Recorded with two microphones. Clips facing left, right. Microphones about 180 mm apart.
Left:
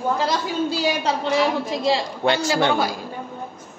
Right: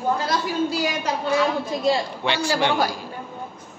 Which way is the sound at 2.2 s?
40° left (ahead or behind).